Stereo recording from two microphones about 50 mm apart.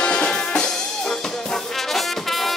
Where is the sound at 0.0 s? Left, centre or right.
Centre.